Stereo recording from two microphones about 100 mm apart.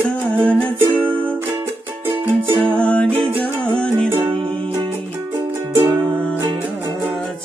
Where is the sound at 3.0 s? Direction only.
65° right (ahead or behind).